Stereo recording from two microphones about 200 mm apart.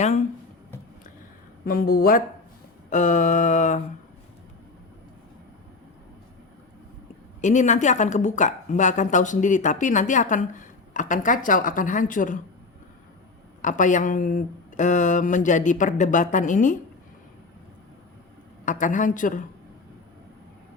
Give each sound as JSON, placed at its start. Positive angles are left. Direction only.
{"t": 1.6, "sound": "a woman's voice", "side_deg": 45}
{"t": 7.4, "sound": "a woman's voice", "side_deg": 35}
{"t": 13.6, "sound": "a woman's voice", "side_deg": 40}
{"t": 18.6, "sound": "a woman's voice", "side_deg": 40}